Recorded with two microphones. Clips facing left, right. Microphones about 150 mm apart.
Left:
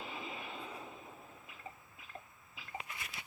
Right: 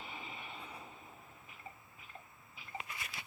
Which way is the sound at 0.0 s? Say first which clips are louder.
Left 4 dB; 90° left.